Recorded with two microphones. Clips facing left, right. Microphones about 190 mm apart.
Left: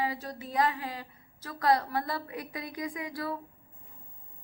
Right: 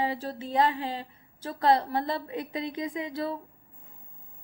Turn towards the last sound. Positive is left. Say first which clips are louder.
# right 3 dB
turn(degrees=-25)  # may be behind; listen again after turning